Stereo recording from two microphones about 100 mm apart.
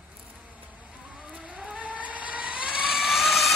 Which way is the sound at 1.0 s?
10° right (ahead or behind).